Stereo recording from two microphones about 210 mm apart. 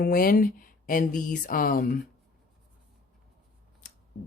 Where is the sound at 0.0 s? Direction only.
45° left (ahead or behind).